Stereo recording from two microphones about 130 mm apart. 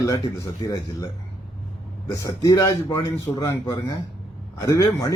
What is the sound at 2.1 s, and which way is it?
A man's voice, 25° left (ahead or behind).